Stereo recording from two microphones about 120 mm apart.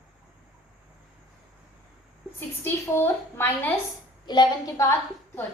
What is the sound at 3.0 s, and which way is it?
Speech, 15° left (ahead or behind).